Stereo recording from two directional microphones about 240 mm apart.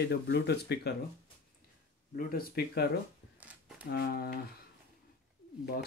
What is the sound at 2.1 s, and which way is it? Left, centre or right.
Speech, left.